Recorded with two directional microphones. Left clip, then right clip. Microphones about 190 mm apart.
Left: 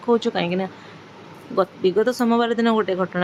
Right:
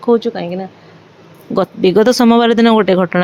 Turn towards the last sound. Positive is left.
turn(degrees=-40)  # may be behind; listen again after turning